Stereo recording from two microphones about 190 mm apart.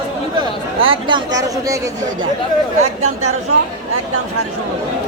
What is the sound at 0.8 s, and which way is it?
Speech, 25° right (ahead or behind).